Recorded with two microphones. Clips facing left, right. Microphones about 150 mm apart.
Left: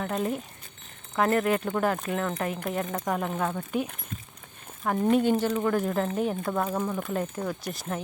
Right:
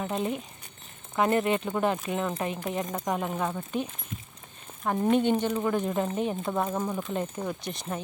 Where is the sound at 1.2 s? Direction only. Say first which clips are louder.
Left 1 dB; 25° right (ahead or behind); by 3.6 s 5° right (ahead or behind).